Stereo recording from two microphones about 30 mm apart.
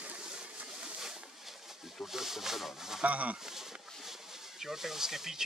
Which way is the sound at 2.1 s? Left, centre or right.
Centre.